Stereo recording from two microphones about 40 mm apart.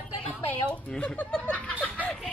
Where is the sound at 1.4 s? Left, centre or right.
Left.